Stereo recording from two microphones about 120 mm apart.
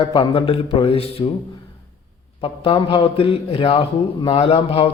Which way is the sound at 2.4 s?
50° left (ahead or behind).